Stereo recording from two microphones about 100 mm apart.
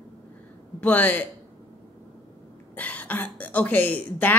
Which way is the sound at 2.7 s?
15° left (ahead or behind).